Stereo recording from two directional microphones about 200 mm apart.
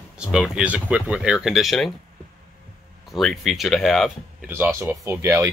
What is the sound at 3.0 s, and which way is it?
Speech, centre (ahead or behind).